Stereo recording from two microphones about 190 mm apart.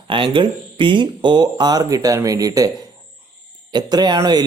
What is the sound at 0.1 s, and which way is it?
A man's voice, 25° right (ahead or behind).